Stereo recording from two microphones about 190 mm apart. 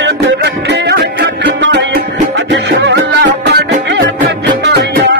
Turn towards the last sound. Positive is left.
turn(degrees=-65)  # may be behind; listen again after turning